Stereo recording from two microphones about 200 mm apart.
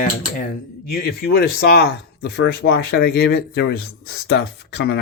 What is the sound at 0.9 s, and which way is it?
Speech, 50° left (ahead or behind).